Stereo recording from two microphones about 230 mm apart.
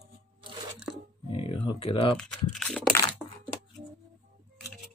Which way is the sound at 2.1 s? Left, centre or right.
Centre.